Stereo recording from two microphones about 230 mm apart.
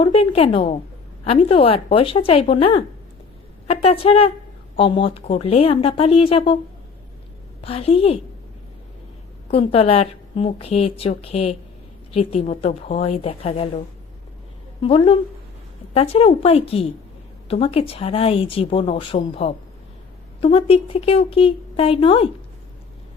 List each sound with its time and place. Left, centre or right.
0.0 s speech: left
7.6 s speech: left
9.5 s speech: left